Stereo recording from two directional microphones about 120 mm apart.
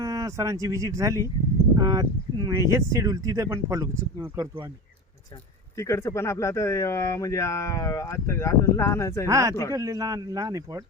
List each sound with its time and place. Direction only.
0.0 s speech: 25° right (ahead or behind)
5.7 s speech: 25° left (ahead or behind)
9.2 s speech: 25° right (ahead or behind)